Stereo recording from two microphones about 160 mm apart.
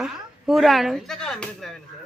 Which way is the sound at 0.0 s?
Centre (ahead or behind).